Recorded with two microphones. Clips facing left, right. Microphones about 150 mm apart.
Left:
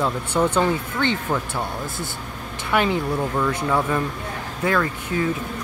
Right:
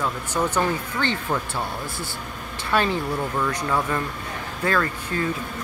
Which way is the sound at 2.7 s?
15° left (ahead or behind).